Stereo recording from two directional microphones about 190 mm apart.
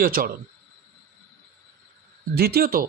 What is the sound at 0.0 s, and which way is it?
Speech, 50° right (ahead or behind).